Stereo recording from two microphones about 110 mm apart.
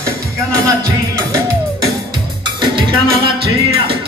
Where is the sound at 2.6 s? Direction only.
50° right (ahead or behind).